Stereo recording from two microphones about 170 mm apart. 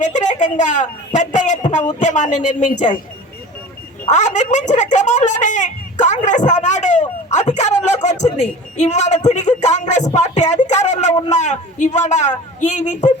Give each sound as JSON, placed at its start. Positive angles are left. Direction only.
{"t": 0.0, "sound": "speech", "side_deg": 45}
{"t": 4.1, "sound": "speech", "side_deg": 45}